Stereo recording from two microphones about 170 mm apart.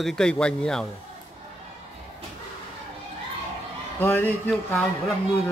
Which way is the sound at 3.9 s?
10° left (ahead or behind).